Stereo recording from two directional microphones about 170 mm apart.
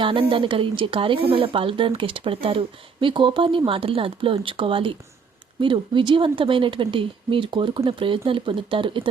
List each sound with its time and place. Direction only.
0.0 s speech: 30° right (ahead or behind)